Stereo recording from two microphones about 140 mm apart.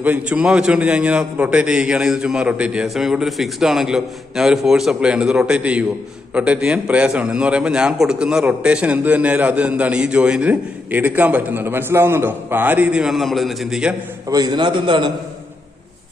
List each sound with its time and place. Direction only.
0.0 s a man's voice: 10° right (ahead or behind)
14.3 s a man's voice: 30° right (ahead or behind)